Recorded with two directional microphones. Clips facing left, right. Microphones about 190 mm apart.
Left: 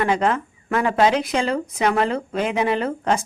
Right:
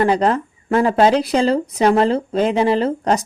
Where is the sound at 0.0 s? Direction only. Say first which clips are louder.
Right 4 dB; 35° right (ahead or behind).